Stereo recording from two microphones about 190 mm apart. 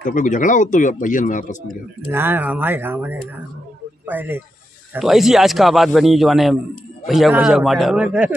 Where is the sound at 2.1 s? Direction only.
10° right (ahead or behind).